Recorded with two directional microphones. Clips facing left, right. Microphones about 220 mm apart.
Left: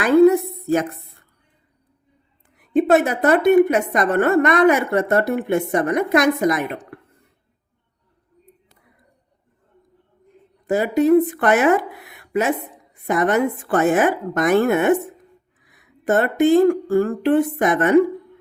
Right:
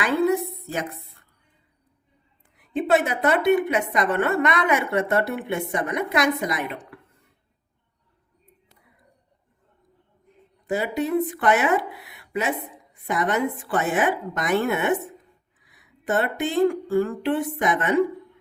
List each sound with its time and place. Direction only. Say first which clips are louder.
0.0 s a sound: left 9 dB; 45° left (ahead or behind)
2.7 s a woman's voice: left 6 dB; 45° left (ahead or behind)
10.7 s a woman's voice: left 9 dB; 45° left (ahead or behind)